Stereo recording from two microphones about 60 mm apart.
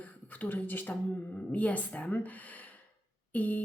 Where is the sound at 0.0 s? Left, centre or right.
Left.